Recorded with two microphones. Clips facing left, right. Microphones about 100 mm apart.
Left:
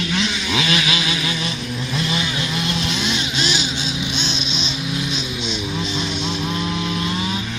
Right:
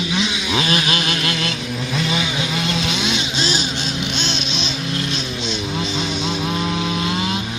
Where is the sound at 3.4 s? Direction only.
35° right (ahead or behind).